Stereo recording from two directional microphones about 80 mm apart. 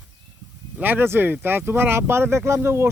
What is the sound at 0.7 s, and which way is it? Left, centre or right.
Speech, right.